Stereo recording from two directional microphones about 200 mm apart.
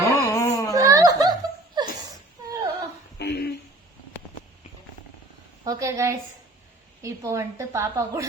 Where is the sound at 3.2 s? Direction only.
55° left (ahead or behind).